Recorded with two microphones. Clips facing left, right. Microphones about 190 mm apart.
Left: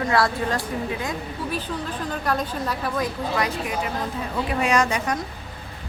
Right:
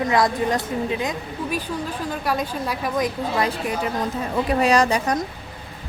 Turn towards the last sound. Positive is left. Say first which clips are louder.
# right 3 dB
turn(degrees=-35)  # may be behind; listen again after turning